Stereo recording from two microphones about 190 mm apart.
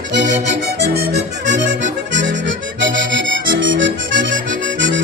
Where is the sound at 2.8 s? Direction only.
75° right (ahead or behind).